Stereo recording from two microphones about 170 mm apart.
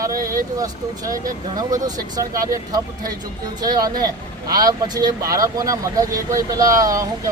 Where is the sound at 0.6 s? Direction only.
20° right (ahead or behind).